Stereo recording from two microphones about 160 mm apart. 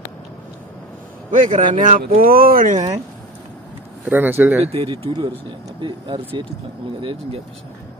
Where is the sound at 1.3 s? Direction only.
50° right (ahead or behind).